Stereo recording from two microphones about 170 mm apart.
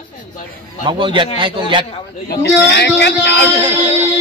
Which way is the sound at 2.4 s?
80° left.